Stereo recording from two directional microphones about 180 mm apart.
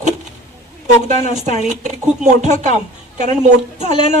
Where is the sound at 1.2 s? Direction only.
40° right (ahead or behind).